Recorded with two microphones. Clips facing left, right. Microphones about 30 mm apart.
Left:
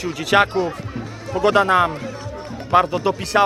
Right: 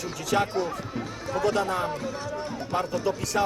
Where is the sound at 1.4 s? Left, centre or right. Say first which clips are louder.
Left 10 dB; left.